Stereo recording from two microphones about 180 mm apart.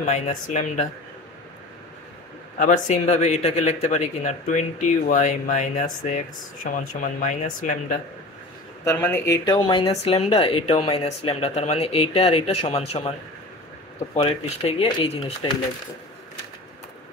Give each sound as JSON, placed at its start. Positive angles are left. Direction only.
{"t": 0.0, "sound": "a man's voice", "side_deg": 40}
{"t": 2.6, "sound": "a man's voice", "side_deg": 40}
{"t": 8.8, "sound": "a man's voice", "side_deg": 15}
{"t": 14.1, "sound": "a man's voice", "side_deg": 35}